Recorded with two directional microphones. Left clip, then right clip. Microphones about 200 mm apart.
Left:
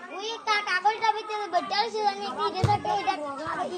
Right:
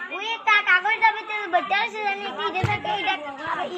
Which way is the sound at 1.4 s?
20° right (ahead or behind).